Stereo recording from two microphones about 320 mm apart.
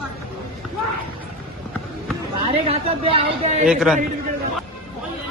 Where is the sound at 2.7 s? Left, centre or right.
Centre.